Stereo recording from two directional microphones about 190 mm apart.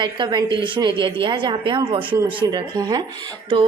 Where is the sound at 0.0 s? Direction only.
25° right (ahead or behind).